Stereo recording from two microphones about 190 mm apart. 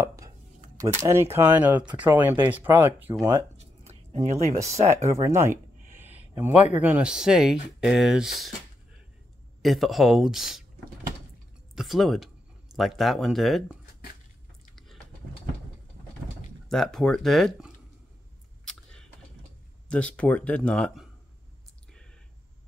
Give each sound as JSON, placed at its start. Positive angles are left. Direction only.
{"t": 0.0, "sound": "dishes", "side_deg": -15}
{"t": 0.7, "sound": "speech", "side_deg": -15}
{"t": 3.5, "sound": "a sound", "side_deg": -35}
{"t": 4.8, "sound": "a man's voice", "side_deg": -15}
{"t": 9.6, "sound": "speech", "side_deg": 0}
{"t": 11.7, "sound": "speech", "side_deg": 0}
{"t": 16.6, "sound": "speech", "side_deg": 0}
{"t": 18.7, "sound": "a sound", "side_deg": 5}
{"t": 19.9, "sound": "speech", "side_deg": 5}